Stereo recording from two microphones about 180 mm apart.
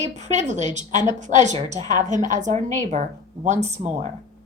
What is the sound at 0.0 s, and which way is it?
A woman's voice, 40° right (ahead or behind).